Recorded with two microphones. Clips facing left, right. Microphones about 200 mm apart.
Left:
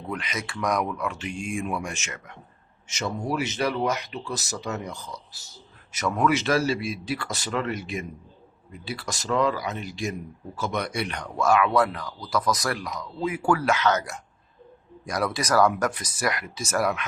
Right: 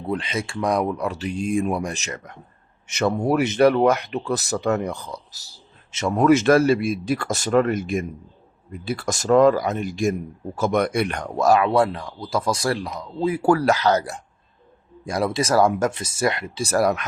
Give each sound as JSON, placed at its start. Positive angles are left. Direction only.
{"t": 0.1, "sound": "speech", "side_deg": -30}
{"t": 2.8, "sound": "speech", "side_deg": -60}
{"t": 5.3, "sound": "a sound", "side_deg": -35}
{"t": 6.2, "sound": "speech", "side_deg": -50}